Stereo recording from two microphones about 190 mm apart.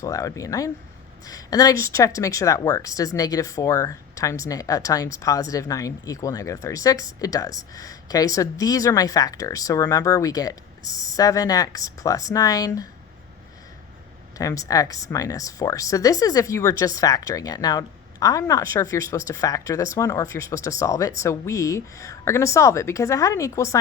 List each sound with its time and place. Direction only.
0.0 s speech: 15° left (ahead or behind)
14.3 s speech: 20° left (ahead or behind)